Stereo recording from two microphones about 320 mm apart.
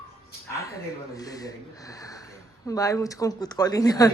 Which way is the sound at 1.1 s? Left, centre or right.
Centre.